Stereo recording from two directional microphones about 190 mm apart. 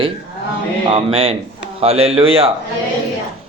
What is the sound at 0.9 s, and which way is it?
Speech, 30° right (ahead or behind).